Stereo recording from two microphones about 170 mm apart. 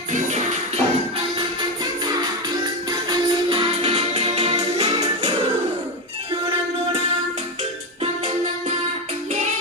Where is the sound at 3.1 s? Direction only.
30° right (ahead or behind).